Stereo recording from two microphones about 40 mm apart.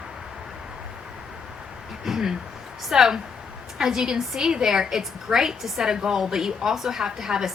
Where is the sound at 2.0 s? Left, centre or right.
Centre.